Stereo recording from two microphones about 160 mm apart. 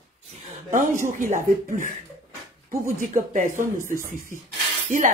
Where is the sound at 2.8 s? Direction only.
55° right (ahead or behind).